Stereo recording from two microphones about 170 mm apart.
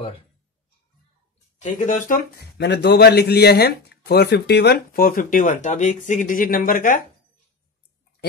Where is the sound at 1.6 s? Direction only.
50° left (ahead or behind).